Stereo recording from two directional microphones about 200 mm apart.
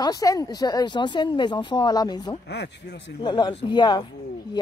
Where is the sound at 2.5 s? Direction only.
60° left (ahead or behind).